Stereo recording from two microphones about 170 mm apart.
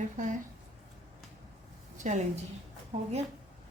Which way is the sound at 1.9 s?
45° right (ahead or behind).